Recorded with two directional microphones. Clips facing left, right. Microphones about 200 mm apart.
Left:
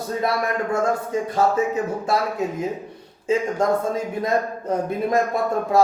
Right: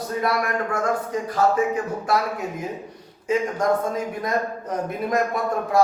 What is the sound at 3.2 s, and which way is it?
A man's voice, 25° left (ahead or behind).